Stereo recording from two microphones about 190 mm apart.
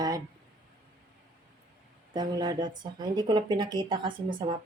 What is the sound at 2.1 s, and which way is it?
Speech, 20° right (ahead or behind).